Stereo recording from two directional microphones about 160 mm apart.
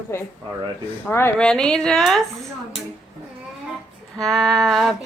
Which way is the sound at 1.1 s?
15° left (ahead or behind).